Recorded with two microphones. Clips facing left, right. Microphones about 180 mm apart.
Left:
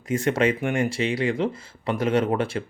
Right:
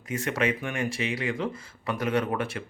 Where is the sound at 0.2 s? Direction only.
30° left (ahead or behind).